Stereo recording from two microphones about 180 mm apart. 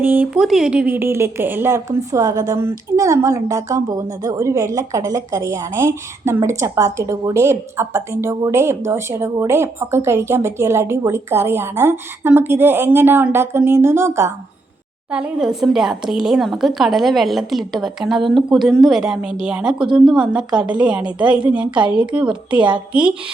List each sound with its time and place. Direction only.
0.0 s a woman's voice: 10° right (ahead or behind)